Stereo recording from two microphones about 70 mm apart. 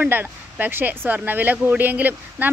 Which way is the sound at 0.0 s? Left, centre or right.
Right.